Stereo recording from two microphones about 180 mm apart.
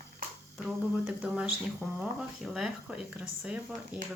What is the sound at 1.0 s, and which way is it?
Speech, 5° right (ahead or behind).